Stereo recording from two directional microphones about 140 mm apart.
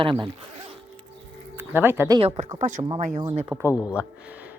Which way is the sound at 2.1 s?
45° right (ahead or behind).